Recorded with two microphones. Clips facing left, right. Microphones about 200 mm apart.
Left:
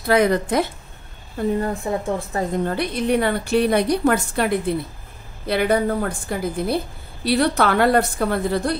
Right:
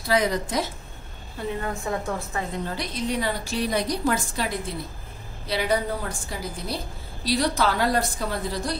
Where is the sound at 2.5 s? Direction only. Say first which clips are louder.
Left 8 dB; 55° left (ahead or behind).